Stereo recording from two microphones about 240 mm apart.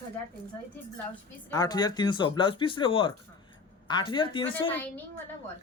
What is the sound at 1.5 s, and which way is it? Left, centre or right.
Speech, centre.